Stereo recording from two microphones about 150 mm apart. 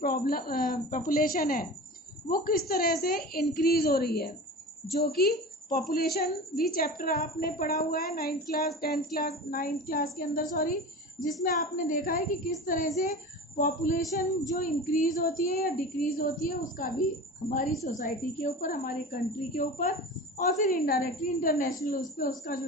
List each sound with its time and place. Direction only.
0.0 s child singing: 85° left
2.3 s a woman's voice: 70° left (ahead or behind); by 8.7 s 90° left
8.8 s child singing: 90° left; by 10.8 s 65° left (ahead or behind)
11.4 s a woman's voice: 65° left (ahead or behind)
17.8 s a woman's voice: 55° left (ahead or behind); by 21.7 s 70° left (ahead or behind)
21.8 s child singing: 70° left (ahead or behind)